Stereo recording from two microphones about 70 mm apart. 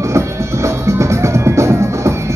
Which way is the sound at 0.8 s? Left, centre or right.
Right.